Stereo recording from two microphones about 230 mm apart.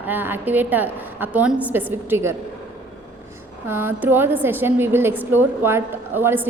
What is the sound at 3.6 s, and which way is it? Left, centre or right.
A woman's voice, centre.